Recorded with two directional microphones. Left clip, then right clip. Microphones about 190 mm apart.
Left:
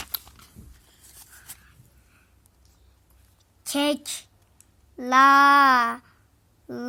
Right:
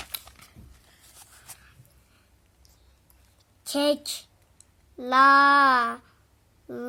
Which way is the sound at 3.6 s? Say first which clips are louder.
Right 1 dB; 5° right (ahead or behind).